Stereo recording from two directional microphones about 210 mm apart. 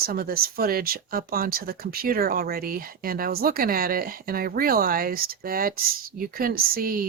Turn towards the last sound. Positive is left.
turn(degrees=-45)  # may be behind; listen again after turning